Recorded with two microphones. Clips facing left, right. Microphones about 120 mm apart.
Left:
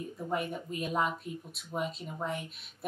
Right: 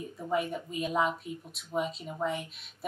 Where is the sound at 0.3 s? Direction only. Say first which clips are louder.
Right 4 dB; centre (ahead or behind).